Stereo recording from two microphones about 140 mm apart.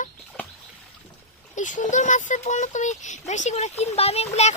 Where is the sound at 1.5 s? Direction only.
65° left (ahead or behind).